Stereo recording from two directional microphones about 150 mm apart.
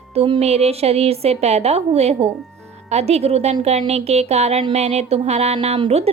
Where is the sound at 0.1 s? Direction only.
40° right (ahead or behind).